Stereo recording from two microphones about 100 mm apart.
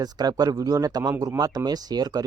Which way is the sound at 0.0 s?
40° right (ahead or behind).